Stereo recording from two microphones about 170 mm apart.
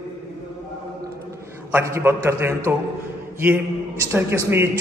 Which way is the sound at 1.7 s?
15° right (ahead or behind).